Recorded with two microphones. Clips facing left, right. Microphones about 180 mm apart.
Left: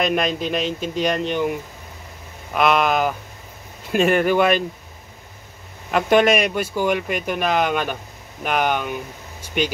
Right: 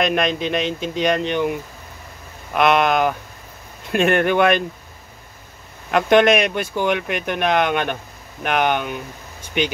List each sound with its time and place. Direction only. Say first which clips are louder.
0.0 s speech: right 1 dB; 5° left (ahead or behind)
5.9 s speech: right 2 dB; 5° left (ahead or behind)